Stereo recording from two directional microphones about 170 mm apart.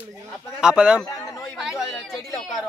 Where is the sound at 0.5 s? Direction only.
5° right (ahead or behind).